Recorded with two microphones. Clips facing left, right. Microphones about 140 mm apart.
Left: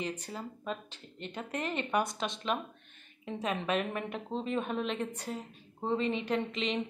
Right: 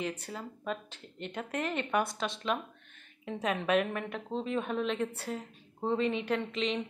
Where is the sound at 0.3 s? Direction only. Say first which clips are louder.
Right 1 dB; centre (ahead or behind).